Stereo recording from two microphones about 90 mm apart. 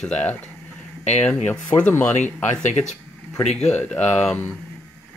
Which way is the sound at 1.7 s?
20° left (ahead or behind).